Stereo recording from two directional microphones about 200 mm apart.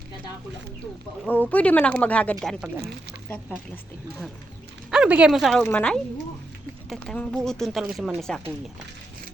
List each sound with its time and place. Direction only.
1.2 s speech: 10° left (ahead or behind)
2.7 s speech: 55° right (ahead or behind)
4.9 s speech: 5° right (ahead or behind)